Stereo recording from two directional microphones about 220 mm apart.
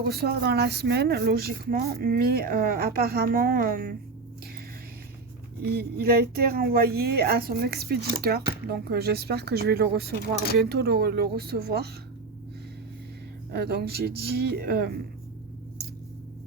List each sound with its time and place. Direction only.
0.0 s speech: 45° right (ahead or behind)
5.6 s speech: 45° right (ahead or behind)
13.5 s speech: 45° right (ahead or behind)